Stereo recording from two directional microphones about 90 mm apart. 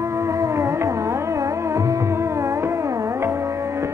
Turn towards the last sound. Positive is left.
turn(degrees=-35)  # may be behind; listen again after turning